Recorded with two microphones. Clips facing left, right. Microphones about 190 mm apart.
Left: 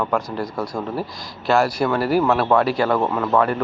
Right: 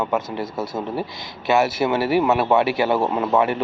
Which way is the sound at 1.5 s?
5° right (ahead or behind).